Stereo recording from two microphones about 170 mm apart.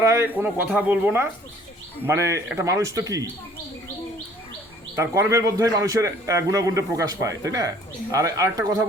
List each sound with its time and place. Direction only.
0.0 s speech: 15° right (ahead or behind)
4.9 s a man's voice: 20° right (ahead or behind)